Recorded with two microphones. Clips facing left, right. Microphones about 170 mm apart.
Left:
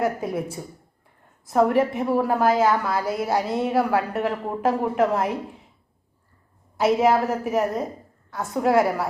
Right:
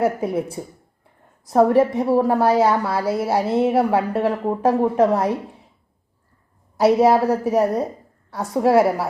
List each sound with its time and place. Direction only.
0.0 s a woman's voice: 30° right (ahead or behind)
6.7 s a woman's voice: 35° right (ahead or behind)